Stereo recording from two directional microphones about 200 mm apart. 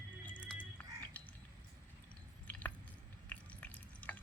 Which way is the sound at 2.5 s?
10° left (ahead or behind).